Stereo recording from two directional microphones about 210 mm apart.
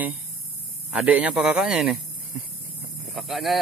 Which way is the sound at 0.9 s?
5° right (ahead or behind).